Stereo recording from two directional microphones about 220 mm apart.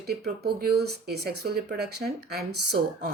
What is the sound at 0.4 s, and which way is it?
Speech, 45° right (ahead or behind).